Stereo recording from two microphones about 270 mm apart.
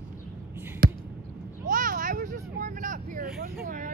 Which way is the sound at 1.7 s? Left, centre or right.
Right.